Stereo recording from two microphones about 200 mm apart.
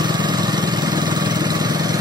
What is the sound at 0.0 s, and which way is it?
Lawn mower, 20° right (ahead or behind).